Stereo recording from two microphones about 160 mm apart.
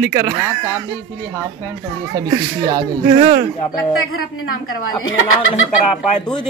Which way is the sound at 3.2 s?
35° right (ahead or behind).